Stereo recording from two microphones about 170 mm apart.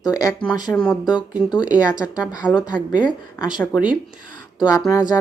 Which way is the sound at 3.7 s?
5° right (ahead or behind).